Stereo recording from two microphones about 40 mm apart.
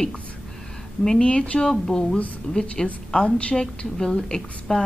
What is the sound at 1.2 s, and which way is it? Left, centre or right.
Speech, left.